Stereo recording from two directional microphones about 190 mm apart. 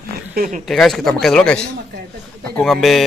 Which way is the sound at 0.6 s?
Centre (ahead or behind).